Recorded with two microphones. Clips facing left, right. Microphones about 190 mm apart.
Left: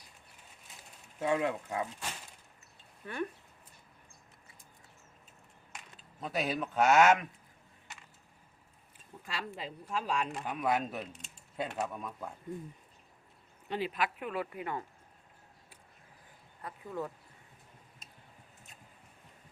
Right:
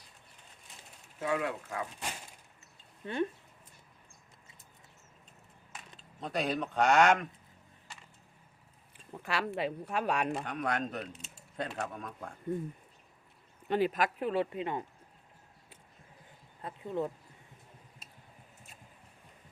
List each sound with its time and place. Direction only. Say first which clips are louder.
0.7 s a sound: even; centre (ahead or behind)
1.2 s speech: left 2 dB; 25° left (ahead or behind)
3.0 s speech: right 5 dB; 25° right (ahead or behind)
6.0 s speech: right 1 dB; 5° left (ahead or behind)
9.1 s speech: right 7 dB; 70° right (ahead or behind)
10.4 s speech: left 2 dB; 5° left (ahead or behind)
13.7 s speech: right 5 dB; 45° right (ahead or behind); by 14.8 s 20° right (ahead or behind)
16.6 s speech: right 4 dB; 25° right (ahead or behind)